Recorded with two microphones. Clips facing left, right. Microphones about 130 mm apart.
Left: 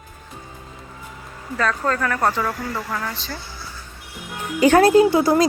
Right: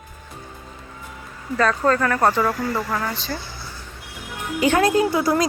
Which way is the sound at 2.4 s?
20° right (ahead or behind).